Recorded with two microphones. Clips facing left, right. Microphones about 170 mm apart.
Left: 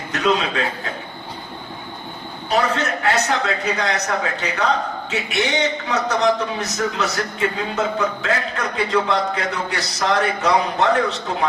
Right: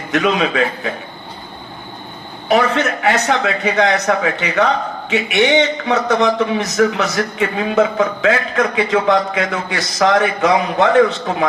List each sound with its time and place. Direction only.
0.1 s a man's voice: 75° right (ahead or behind)
2.5 s a man's voice: 85° right